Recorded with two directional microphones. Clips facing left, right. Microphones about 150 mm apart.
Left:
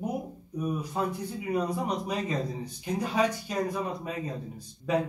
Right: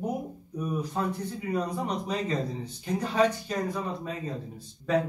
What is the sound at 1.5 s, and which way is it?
A man's voice, 10° left (ahead or behind).